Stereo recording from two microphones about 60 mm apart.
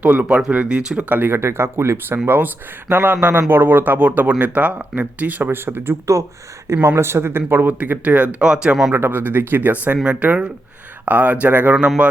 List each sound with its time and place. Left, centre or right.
0.0 s speech: right
1.1 s speech: right
1.4 s speech: right
7.7 s speech: right
8.9 s speech: right